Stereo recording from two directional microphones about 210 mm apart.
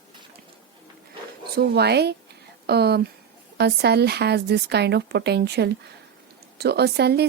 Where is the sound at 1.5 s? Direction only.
50° right (ahead or behind).